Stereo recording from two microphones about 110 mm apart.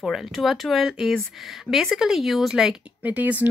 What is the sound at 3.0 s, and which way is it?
Speech, 15° right (ahead or behind).